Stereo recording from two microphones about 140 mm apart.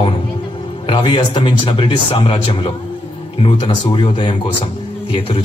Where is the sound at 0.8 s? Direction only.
35° left (ahead or behind).